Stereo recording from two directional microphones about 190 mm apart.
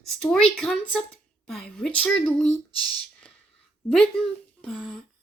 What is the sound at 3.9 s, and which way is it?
Speech, 5° left (ahead or behind).